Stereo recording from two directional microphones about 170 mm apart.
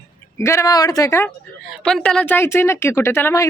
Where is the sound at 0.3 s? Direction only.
15° left (ahead or behind).